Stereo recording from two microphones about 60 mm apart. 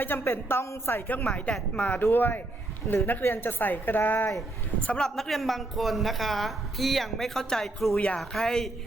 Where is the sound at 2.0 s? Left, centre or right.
Left.